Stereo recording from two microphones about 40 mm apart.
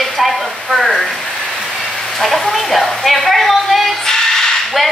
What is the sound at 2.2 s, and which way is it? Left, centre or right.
Speech, centre.